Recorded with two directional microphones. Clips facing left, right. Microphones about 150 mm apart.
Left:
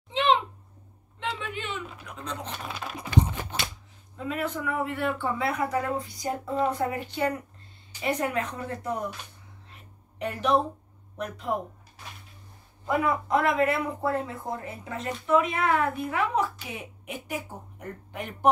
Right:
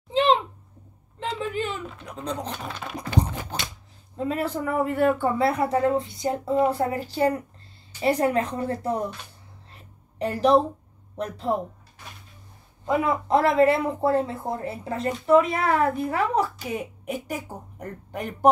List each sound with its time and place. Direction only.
0.1 s a sound: 35° right (ahead or behind)
1.4 s speech: 40° right (ahead or behind)
2.5 s speech: centre (ahead or behind)
4.2 s speech: 35° right (ahead or behind)
5.5 s speech: 30° right (ahead or behind)
9.7 s a sound: 35° right (ahead or behind)
11.1 s speech: 30° right (ahead or behind)
12.8 s speech: 20° right (ahead or behind); by 18.5 s 40° right (ahead or behind)